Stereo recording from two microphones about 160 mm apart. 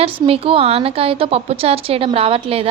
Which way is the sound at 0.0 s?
35° right (ahead or behind).